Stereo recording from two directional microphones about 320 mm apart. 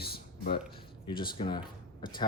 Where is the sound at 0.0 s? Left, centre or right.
Left.